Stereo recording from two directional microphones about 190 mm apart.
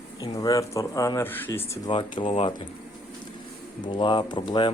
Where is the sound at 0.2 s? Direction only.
20° left (ahead or behind).